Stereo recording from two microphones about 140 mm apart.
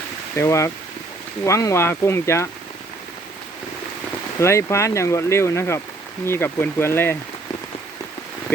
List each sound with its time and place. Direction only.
0.3 s speech: 20° left (ahead or behind)
4.4 s speech: 20° left (ahead or behind)